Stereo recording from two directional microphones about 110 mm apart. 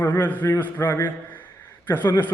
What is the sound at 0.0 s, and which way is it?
A man's voice, 20° left (ahead or behind).